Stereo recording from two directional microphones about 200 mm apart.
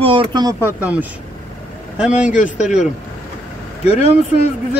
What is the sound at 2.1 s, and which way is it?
Speech, 35° left (ahead or behind).